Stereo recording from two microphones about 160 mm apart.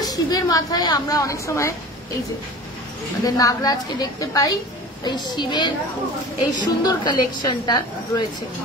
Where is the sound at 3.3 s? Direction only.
25° left (ahead or behind).